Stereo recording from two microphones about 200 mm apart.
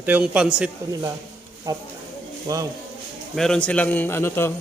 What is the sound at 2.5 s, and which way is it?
Speech, 20° right (ahead or behind).